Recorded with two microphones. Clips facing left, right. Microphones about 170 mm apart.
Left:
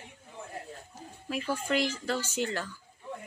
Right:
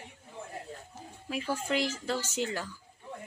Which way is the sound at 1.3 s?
5° right (ahead or behind).